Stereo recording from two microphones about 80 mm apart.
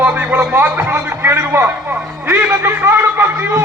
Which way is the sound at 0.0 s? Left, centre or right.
Right.